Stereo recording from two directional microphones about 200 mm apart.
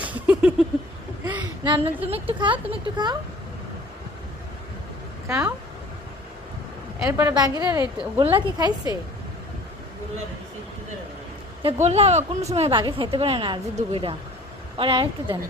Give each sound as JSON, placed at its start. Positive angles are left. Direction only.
{"t": 0.0, "sound": "a sound", "side_deg": -10}
{"t": 1.2, "sound": "a woman's voice", "side_deg": -20}
{"t": 5.3, "sound": "a woman's voice", "side_deg": -15}
{"t": 7.0, "sound": "a woman's voice", "side_deg": -15}
{"t": 11.6, "sound": "speech", "side_deg": -30}